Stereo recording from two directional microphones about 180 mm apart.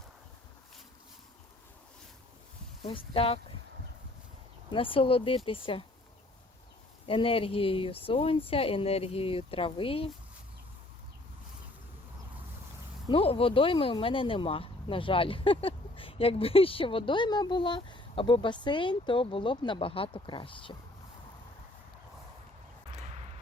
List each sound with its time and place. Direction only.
3.1 s speech: 30° left (ahead or behind)
4.7 s speech: 30° left (ahead or behind)
7.1 s speech: 30° left (ahead or behind)
13.1 s speech: 30° left (ahead or behind)